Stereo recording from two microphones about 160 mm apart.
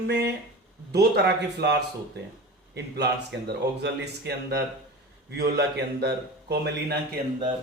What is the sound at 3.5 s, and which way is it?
A man's voice, 90° right.